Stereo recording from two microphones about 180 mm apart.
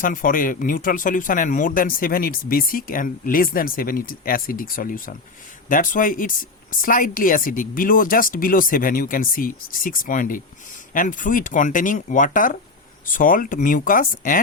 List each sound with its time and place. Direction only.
0.0 s speech: 50° left (ahead or behind)